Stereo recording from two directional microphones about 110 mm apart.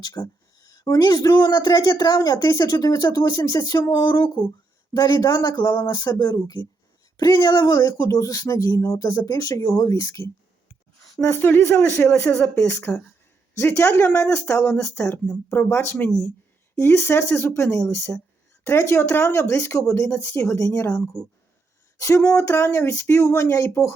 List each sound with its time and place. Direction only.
0.0 s a woman's voice: 35° left (ahead or behind)
11.3 s speech: 20° left (ahead or behind)
20.1 s speech: 15° left (ahead or behind)
20.4 s speech: 30° left (ahead or behind)